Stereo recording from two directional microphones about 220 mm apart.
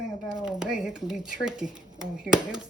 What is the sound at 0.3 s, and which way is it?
Speech, 5° right (ahead or behind).